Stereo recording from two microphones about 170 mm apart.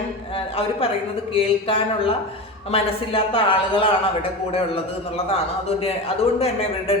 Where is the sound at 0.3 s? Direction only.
35° left (ahead or behind).